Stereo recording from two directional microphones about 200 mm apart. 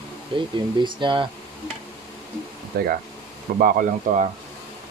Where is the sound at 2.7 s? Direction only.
55° right (ahead or behind).